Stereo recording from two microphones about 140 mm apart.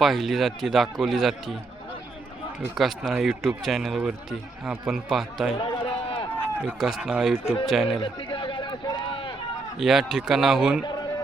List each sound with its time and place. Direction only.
0.0 s a man's voice: centre (ahead or behind)
2.7 s a man's voice: centre (ahead or behind)
5.5 s run: 40° left (ahead or behind)
6.6 s speech: 5° right (ahead or behind)
7.9 s a sound: 40° left (ahead or behind)
9.7 s a man's voice: 5° right (ahead or behind)